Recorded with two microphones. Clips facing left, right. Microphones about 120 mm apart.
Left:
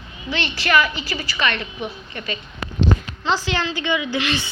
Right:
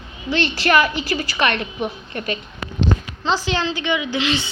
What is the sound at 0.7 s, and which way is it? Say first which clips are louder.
A woman's voice: right 1 dB; 45° right (ahead or behind).